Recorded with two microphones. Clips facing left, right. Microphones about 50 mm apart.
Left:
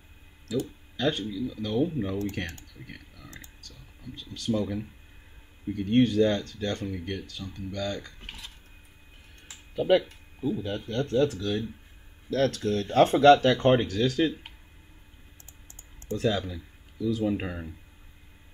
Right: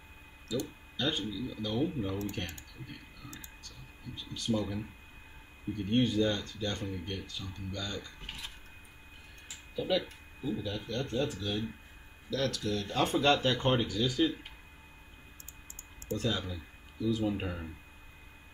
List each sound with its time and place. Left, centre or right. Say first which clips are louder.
0.9 s speech: left 6 dB; left
1.8 s speech: left 6 dB; left
4.5 s speech: left 4 dB; left
5.9 s speech: left 7 dB; left
6.6 s speech: left 5 dB; left
7.2 s speech: left 4 dB; left
9.8 s speech: left 9 dB; left
12.3 s speech: left 7 dB; left
13.4 s speech: left 7 dB; left
13.7 s speech: left 7 dB; left
16.1 s speech: left 6 dB; left